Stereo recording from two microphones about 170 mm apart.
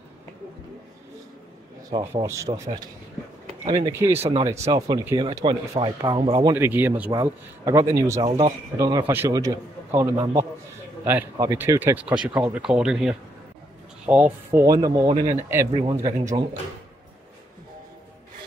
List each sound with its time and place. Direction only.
1.9 s speech: 30° right (ahead or behind)
2.2 s speech: 15° right (ahead or behind)
6.5 s speech: 10° right (ahead or behind)
7.1 s speech: 20° right (ahead or behind)
8.2 s speech: 35° right (ahead or behind)
8.7 s speech: 20° right (ahead or behind)
11.1 s speech: 15° right (ahead or behind)